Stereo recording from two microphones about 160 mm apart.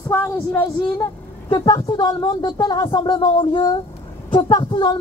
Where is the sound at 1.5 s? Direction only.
30° left (ahead or behind).